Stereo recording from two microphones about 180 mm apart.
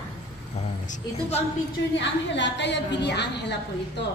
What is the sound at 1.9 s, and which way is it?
A woman's voice, 85° left.